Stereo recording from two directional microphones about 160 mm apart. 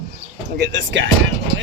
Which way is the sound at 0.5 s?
90° right.